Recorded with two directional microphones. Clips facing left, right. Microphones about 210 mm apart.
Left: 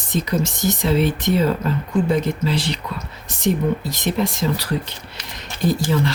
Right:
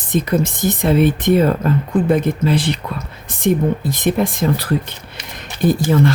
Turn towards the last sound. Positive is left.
turn(degrees=-55)  # may be behind; listen again after turning